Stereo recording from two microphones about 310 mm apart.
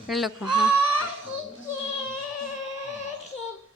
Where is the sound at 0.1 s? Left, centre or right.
Centre.